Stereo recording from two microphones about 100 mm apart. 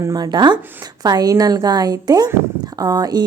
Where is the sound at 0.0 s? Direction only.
40° right (ahead or behind).